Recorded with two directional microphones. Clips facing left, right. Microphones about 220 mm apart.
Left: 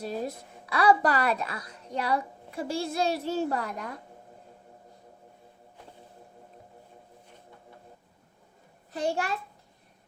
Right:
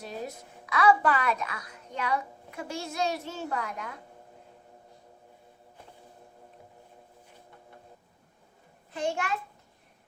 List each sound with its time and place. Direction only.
0.6 s a child's voice: 35° left (ahead or behind)
8.9 s a child's voice: 35° left (ahead or behind)